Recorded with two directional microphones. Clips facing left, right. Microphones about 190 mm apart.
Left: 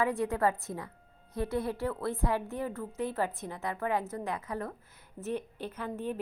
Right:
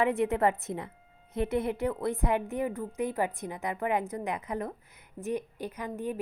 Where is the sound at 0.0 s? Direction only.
20° right (ahead or behind).